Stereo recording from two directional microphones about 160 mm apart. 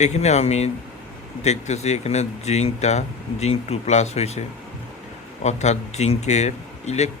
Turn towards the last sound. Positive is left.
turn(degrees=45)  # may be behind; listen again after turning